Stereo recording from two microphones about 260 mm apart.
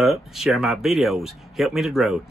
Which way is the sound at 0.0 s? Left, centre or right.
Centre.